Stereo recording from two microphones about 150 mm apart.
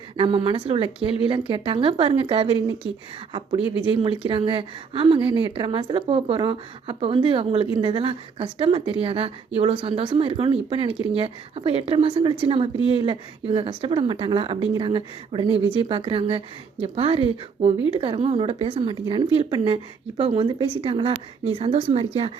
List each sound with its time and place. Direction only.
0.2 s a woman's voice: 35° right (ahead or behind)
4.2 s a woman's voice: 35° right (ahead or behind)